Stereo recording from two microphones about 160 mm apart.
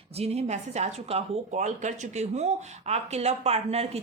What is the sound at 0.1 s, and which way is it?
Speech, 40° right (ahead or behind).